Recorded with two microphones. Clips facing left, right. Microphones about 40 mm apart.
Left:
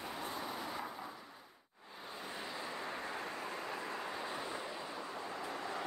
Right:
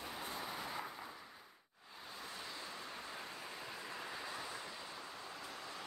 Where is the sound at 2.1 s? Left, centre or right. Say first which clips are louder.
Left 4 dB; left.